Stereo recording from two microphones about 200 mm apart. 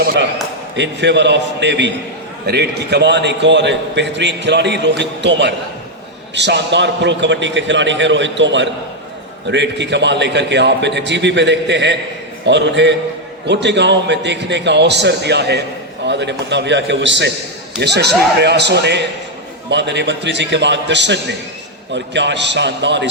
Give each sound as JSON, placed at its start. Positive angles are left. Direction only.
{"t": 0.0, "sound": "a man's voice", "side_deg": -55}